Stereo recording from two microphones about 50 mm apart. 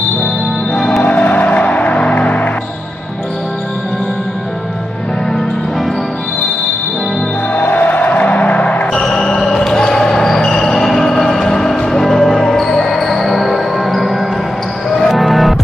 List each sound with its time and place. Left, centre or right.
0.7 s music: centre
1.0 s music: left
7.5 s music: left
9.0 s basketball bounce: centre
14.9 s music: centre